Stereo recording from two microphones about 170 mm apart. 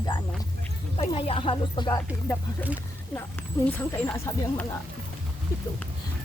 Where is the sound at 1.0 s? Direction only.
35° left (ahead or behind).